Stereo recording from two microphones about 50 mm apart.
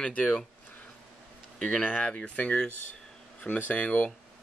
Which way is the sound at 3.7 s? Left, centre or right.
Left.